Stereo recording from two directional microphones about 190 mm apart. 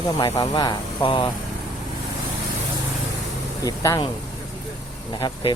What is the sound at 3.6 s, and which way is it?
Speech, 20° left (ahead or behind).